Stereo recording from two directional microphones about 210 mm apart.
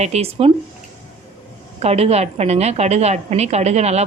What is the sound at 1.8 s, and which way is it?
A woman's voice, 30° right (ahead or behind).